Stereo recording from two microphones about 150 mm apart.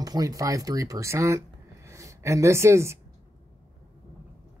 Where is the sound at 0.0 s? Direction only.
25° right (ahead or behind).